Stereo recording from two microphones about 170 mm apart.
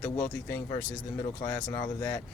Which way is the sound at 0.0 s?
10° left (ahead or behind).